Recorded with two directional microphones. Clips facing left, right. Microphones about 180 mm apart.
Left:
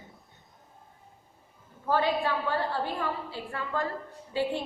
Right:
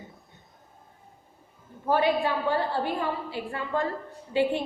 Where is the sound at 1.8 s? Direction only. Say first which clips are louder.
Right 3 dB; 15° right (ahead or behind).